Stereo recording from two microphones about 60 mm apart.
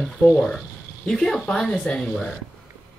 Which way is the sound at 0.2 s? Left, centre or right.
Left.